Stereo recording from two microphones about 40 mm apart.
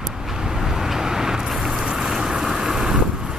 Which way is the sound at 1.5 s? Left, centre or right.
Centre.